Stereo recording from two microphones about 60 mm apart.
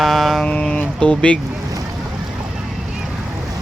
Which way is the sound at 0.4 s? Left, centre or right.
Centre.